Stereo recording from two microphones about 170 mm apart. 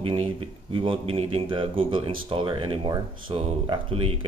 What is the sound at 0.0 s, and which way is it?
Speech, 30° right (ahead or behind).